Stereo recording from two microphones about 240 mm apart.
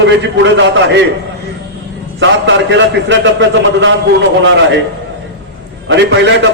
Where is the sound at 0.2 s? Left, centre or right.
Right.